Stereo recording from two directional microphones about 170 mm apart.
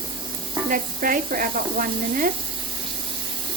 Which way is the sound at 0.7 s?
55° right (ahead or behind).